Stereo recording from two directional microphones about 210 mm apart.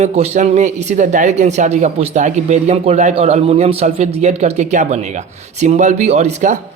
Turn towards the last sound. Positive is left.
turn(degrees=-35)  # may be behind; listen again after turning